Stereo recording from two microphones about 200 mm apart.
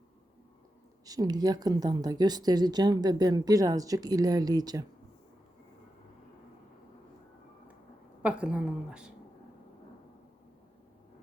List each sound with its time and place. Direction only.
1.0 s speech: 20° right (ahead or behind)
8.2 s a woman's voice: 5° right (ahead or behind)